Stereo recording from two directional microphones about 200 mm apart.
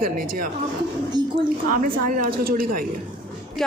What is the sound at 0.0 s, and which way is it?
Speech, 45° right (ahead or behind).